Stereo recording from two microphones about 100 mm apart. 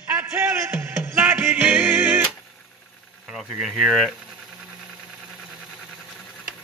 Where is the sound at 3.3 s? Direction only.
Centre (ahead or behind).